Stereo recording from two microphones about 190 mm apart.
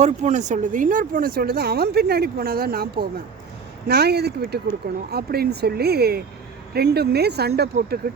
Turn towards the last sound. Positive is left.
turn(degrees=-55)  # may be behind; listen again after turning